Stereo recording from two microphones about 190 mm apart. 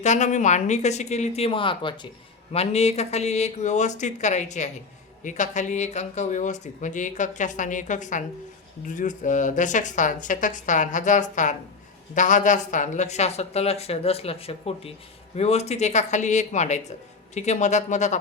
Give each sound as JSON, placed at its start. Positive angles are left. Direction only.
{"t": 0.0, "sound": "speech", "side_deg": 40}